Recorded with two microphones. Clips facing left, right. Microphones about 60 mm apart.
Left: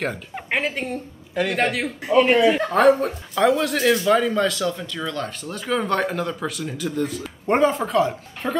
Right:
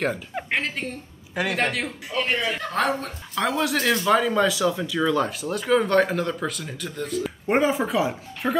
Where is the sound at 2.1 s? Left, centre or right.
Centre.